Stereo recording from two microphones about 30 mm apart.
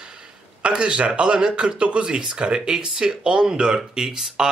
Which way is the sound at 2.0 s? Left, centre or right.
Right.